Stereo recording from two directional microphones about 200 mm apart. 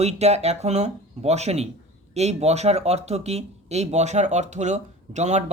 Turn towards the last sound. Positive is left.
turn(degrees=-35)  # may be behind; listen again after turning